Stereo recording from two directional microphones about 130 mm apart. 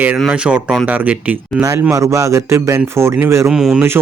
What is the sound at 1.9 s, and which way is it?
Speech, 20° right (ahead or behind).